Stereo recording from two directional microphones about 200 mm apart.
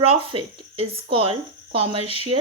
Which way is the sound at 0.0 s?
30° right (ahead or behind).